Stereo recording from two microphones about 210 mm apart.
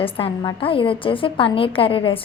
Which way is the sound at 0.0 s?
25° left (ahead or behind).